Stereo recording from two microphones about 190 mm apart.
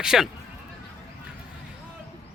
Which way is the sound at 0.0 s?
5° right (ahead or behind).